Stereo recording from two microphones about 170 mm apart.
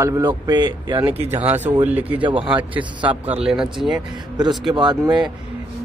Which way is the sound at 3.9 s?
25° right (ahead or behind).